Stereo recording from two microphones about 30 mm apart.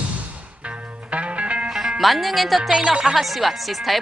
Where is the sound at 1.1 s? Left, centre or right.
Right.